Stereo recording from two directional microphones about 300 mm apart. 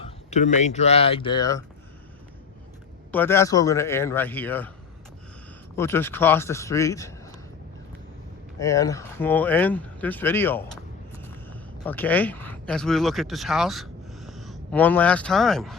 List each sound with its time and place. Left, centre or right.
0.0 s speech: left
3.1 s speech: centre
5.7 s speech: centre
8.5 s speech: centre